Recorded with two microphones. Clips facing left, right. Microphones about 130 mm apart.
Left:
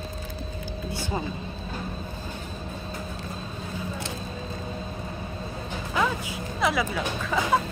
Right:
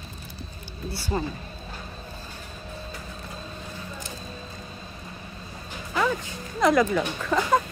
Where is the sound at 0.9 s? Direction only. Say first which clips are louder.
Right 2 dB; 15° left (ahead or behind).